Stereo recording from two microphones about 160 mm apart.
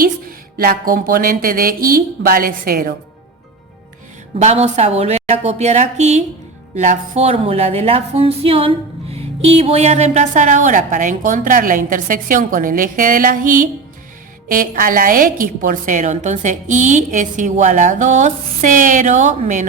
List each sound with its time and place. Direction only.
0.0 s speech: 65° right (ahead or behind)
4.4 s a woman's voice: 45° right (ahead or behind)